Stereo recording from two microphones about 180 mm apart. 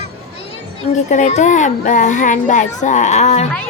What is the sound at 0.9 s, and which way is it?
A child's voice, 40° left (ahead or behind).